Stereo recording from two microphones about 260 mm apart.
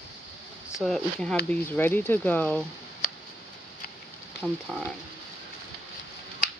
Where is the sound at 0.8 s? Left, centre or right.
Centre.